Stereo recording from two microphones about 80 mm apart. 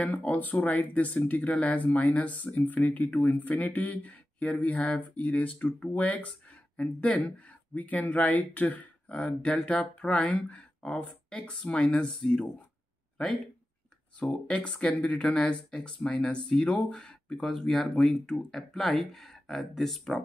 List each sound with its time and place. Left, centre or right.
0.0 s speech: centre
14.2 s speech: centre